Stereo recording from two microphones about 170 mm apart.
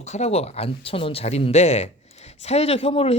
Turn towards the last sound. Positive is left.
turn(degrees=35)  # may be behind; listen again after turning